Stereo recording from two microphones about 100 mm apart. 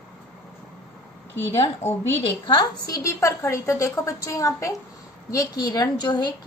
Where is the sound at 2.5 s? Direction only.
40° left (ahead or behind).